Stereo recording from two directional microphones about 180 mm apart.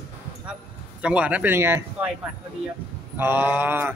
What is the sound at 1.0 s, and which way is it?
Speech, 5° right (ahead or behind).